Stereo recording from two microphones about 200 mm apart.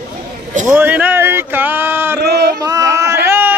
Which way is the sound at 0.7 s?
10° right (ahead or behind).